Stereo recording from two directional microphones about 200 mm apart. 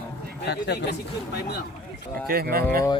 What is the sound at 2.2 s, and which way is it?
Speech, 50° right (ahead or behind).